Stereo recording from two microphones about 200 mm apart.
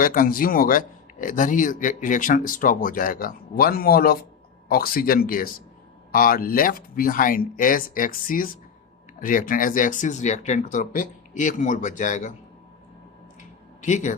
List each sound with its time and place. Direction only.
0.0 s speech: 45° left (ahead or behind)
13.8 s speech: 35° left (ahead or behind)